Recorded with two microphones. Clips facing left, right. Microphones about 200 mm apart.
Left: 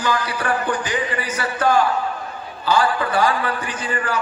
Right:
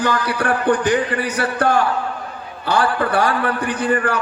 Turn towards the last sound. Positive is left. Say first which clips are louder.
# right 6 dB
turn(degrees=-60)  # may be behind; listen again after turning